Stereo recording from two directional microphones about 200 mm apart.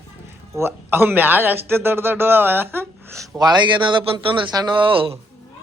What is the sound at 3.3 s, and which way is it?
Speech, 20° right (ahead or behind).